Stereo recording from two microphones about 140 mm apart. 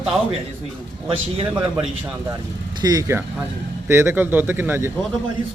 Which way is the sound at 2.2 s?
25° right (ahead or behind).